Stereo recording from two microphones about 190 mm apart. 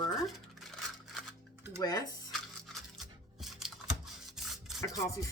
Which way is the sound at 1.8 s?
20° left (ahead or behind).